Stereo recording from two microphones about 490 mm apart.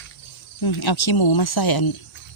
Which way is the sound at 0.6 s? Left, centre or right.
Left.